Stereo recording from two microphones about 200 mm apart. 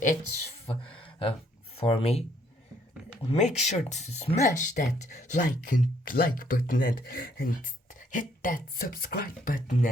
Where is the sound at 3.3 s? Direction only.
35° left (ahead or behind).